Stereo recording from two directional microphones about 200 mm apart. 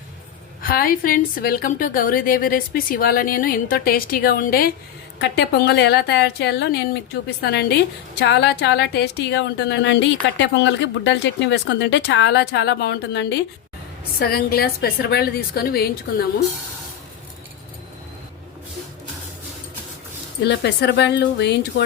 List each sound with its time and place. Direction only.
0.6 s a woman's voice: 45° left (ahead or behind)
5.2 s a woman's voice: 60° left (ahead or behind)
20.4 s a woman's voice: 55° left (ahead or behind)